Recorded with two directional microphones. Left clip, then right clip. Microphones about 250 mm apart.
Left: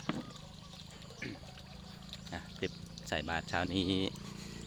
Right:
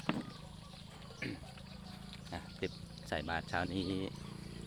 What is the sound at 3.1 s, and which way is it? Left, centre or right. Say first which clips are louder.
Speech: left 2 dB; centre.